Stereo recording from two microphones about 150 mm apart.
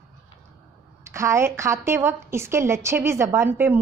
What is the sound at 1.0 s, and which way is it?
A woman's voice, 20° right (ahead or behind).